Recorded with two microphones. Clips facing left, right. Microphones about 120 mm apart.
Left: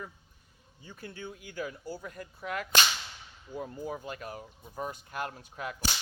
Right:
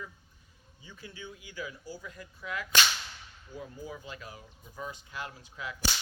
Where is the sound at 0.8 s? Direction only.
50° left (ahead or behind).